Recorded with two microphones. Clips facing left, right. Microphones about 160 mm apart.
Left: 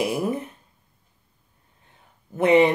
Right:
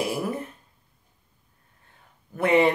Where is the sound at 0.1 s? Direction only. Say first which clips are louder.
Left 3 dB; 20° left (ahead or behind).